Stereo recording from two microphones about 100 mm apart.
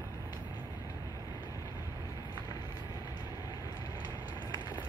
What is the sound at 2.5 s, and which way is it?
Vehicle, 40° left (ahead or behind).